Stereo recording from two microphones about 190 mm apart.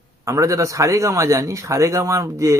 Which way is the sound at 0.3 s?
15° right (ahead or behind).